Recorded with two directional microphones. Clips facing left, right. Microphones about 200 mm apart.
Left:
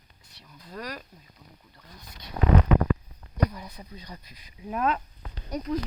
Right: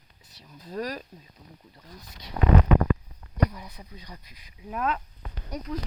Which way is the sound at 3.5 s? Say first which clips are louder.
Left 2 dB; 5° right (ahead or behind).